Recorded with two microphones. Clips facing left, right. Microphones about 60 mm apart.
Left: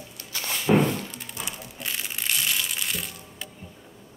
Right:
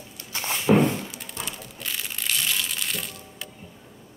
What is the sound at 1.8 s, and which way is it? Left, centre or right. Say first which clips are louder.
Crushing: left 1 dB; centre.